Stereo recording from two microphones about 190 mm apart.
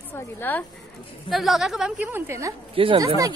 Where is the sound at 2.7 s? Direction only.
30° right (ahead or behind).